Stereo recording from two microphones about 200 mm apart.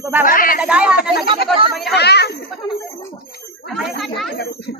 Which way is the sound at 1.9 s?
55° left (ahead or behind).